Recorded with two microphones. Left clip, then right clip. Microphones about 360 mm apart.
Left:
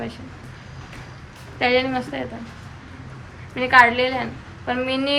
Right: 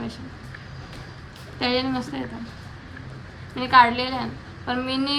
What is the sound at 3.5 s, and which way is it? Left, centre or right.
Speech, centre.